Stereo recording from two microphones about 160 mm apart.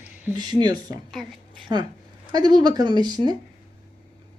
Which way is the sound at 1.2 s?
Centre (ahead or behind).